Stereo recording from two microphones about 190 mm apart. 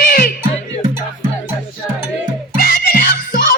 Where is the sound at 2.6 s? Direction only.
50° left (ahead or behind).